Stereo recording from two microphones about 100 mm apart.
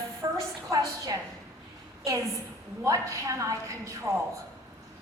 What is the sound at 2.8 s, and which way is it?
A woman's voice, 30° right (ahead or behind).